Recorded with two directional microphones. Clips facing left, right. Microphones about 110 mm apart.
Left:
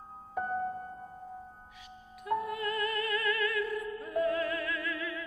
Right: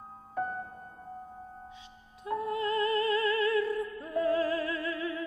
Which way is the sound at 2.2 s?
25° right (ahead or behind).